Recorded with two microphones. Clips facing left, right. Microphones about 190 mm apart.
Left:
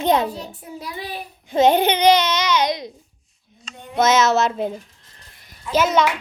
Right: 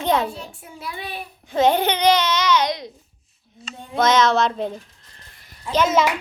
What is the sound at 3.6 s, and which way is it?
A child's voice, 5° left (ahead or behind).